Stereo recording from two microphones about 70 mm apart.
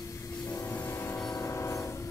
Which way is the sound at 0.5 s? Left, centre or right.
Left.